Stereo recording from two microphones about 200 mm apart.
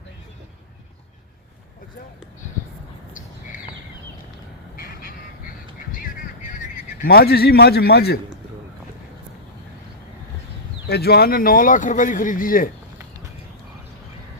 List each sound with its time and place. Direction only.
4.8 s quack: 50° left (ahead or behind)
6.4 s speech: 40° left (ahead or behind)
10.8 s speech: 55° left (ahead or behind)